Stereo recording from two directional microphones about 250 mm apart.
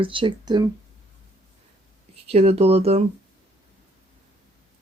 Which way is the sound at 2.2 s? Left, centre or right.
Right.